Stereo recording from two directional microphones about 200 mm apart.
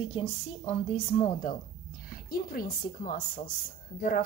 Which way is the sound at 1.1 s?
35° left (ahead or behind).